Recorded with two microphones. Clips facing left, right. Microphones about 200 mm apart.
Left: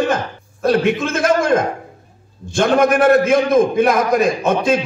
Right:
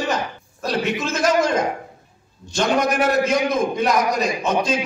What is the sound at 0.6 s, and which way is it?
A man's voice, 55° left (ahead or behind).